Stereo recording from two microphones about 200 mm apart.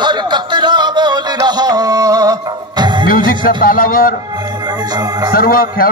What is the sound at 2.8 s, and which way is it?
Music, 25° right (ahead or behind).